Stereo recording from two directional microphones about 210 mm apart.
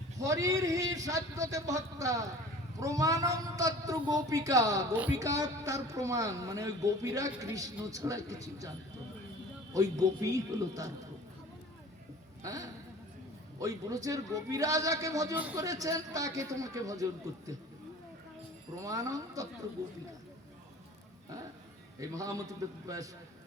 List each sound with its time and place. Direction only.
0.2 s a woman's voice: 15° right (ahead or behind)
9.7 s a woman's voice: 15° right (ahead or behind)
12.4 s a man's voice: 15° right (ahead or behind)
18.8 s a woman's voice: 15° right (ahead or behind)
22.0 s a woman's voice: 15° right (ahead or behind)